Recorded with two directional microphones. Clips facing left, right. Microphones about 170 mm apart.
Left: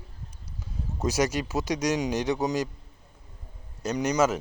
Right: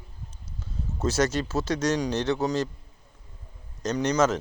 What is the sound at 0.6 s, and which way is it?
Speech, 15° left (ahead or behind).